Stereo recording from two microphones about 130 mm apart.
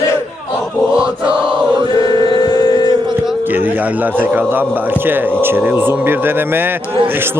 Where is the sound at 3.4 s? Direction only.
15° right (ahead or behind).